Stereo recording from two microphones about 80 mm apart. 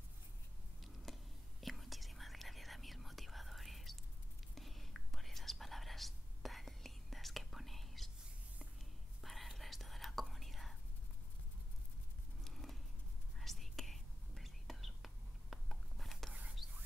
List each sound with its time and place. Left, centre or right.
1.0 s whispering: centre
9.2 s whispering: centre
12.4 s a sound: centre
13.4 s whispering: centre